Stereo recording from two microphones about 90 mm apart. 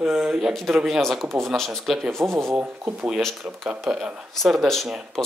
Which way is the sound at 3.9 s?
15° right (ahead or behind).